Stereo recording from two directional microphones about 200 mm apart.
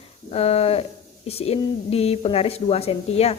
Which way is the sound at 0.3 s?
30° left (ahead or behind).